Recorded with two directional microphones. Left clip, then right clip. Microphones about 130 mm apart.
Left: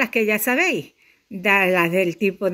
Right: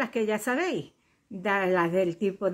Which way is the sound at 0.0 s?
40° left (ahead or behind).